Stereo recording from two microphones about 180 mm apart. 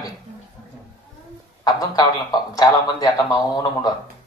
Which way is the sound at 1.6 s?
20° left (ahead or behind).